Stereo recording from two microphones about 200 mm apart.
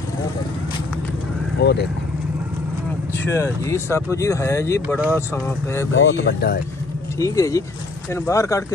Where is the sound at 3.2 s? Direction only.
15° left (ahead or behind).